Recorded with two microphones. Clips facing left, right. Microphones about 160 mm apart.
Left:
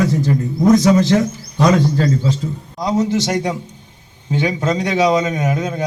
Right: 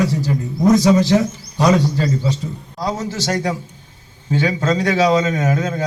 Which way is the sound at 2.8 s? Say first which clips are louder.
Left 6 dB; 20° left (ahead or behind).